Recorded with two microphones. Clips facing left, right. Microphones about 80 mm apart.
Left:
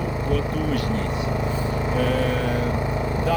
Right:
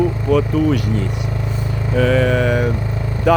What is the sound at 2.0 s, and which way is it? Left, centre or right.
Speech, right.